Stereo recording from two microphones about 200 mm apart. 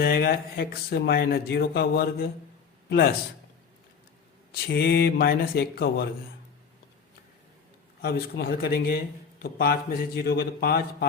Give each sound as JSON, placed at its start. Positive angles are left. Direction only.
{"t": 0.0, "sound": "speech", "side_deg": 50}
{"t": 4.5, "sound": "speech", "side_deg": 55}
{"t": 8.0, "sound": "speech", "side_deg": 50}